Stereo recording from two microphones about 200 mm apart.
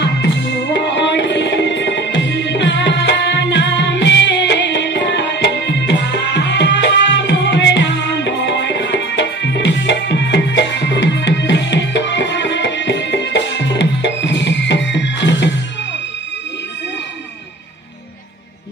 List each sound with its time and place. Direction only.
0.0 s music: 60° left (ahead or behind)